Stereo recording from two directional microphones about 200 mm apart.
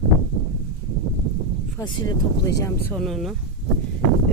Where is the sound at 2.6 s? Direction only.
5° left (ahead or behind).